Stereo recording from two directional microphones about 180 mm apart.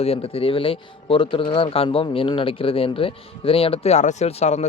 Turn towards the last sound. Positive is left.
turn(degrees=35)  # may be behind; listen again after turning